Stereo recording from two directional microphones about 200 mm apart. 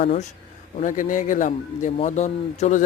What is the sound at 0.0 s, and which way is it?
A man's voice, 35° left (ahead or behind).